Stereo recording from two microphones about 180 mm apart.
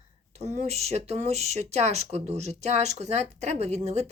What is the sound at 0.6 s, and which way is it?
Speech, 35° right (ahead or behind).